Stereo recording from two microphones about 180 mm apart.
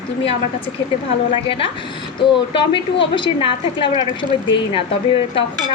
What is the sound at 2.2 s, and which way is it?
A woman's voice, 30° left (ahead or behind).